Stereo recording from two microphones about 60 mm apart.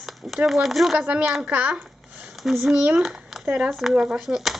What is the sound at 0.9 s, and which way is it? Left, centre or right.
Speech, right.